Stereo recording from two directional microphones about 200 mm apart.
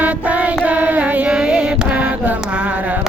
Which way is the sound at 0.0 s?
5° right (ahead or behind).